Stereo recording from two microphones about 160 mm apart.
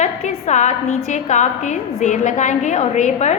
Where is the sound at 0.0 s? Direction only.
45° left (ahead or behind).